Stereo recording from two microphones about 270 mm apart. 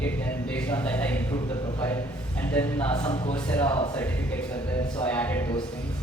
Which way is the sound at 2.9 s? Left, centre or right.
Left.